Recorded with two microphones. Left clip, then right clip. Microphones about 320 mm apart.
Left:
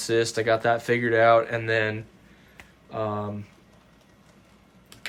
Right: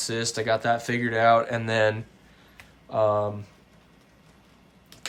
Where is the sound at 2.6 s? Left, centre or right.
Centre.